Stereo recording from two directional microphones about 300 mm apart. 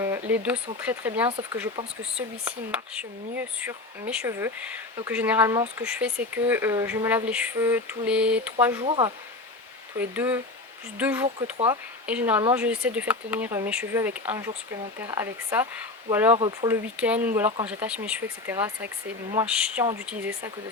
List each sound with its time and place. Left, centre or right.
0.0 s speech: centre
8.8 s speech: centre
10.0 s speech: centre
11.5 s speech: centre
12.0 s speech: centre